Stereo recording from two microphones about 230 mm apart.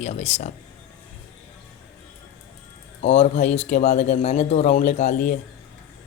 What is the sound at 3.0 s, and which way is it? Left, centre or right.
Speech, left.